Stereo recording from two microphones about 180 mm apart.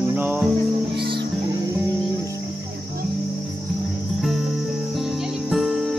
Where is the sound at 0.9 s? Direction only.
30° right (ahead or behind).